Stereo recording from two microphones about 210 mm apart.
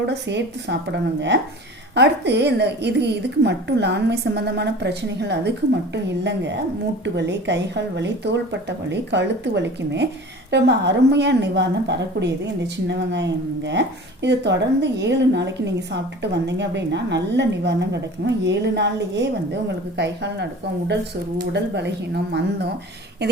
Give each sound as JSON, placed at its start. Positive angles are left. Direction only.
{"t": 0.1, "sound": "a woman's voice", "side_deg": -55}
{"t": 2.0, "sound": "a woman's voice", "side_deg": -55}